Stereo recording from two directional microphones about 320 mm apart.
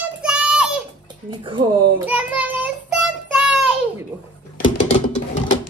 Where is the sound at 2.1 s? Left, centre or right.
Centre.